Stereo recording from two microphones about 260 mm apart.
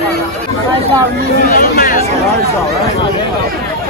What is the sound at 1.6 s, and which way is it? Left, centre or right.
Speech, left.